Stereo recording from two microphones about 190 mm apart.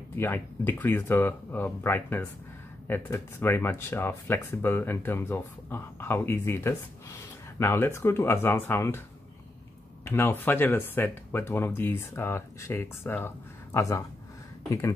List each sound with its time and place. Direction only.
0.1 s speech: 10° left (ahead or behind)
10.0 s speech: 10° left (ahead or behind)